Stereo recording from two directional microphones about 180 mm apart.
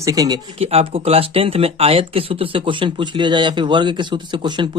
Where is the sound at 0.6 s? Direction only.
35° right (ahead or behind).